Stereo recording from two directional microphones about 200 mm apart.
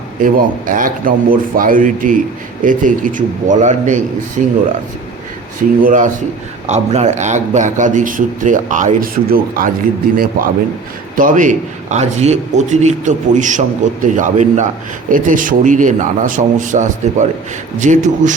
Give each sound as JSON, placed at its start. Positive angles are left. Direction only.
{"t": 0.2, "sound": "a man's voice", "side_deg": -45}
{"t": 5.8, "sound": "a man's voice", "side_deg": -40}